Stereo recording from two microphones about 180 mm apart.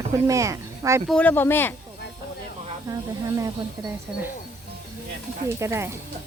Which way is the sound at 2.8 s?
20° right (ahead or behind).